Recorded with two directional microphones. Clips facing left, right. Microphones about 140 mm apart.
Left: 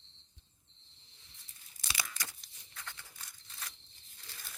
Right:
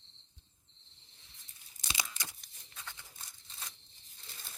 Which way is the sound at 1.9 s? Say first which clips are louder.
Even; 20° right (ahead or behind).